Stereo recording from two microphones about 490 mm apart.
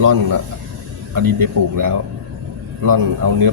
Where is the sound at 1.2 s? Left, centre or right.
Right.